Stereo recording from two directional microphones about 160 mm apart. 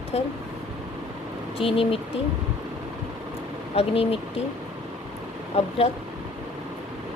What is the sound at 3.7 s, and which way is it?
Speech, 35° left (ahead or behind).